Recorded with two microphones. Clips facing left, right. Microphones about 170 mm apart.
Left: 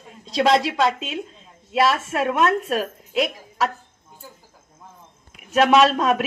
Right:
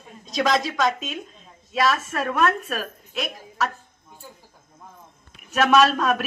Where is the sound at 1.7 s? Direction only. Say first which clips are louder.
Left 3 dB; 25° left (ahead or behind).